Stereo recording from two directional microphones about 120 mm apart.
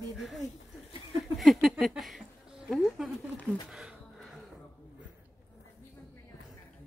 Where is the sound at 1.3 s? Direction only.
Centre (ahead or behind).